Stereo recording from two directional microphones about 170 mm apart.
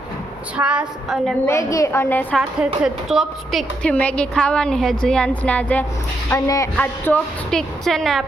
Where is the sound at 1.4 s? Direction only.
20° left (ahead or behind).